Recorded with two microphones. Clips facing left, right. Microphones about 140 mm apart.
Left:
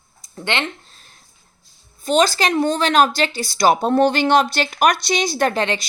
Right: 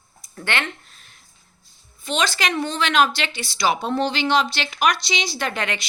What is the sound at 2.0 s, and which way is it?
A woman's voice, 40° left (ahead or behind).